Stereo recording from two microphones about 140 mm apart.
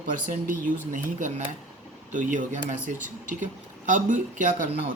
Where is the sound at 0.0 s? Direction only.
80° right; by 4.7 s 65° right (ahead or behind).